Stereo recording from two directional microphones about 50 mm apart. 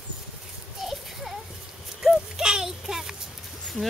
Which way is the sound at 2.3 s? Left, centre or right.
Centre.